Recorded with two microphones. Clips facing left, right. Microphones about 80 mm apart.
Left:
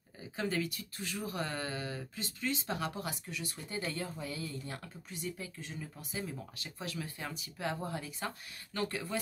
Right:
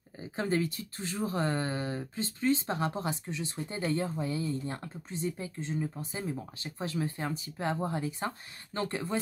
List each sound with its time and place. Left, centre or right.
0.2 s speech: right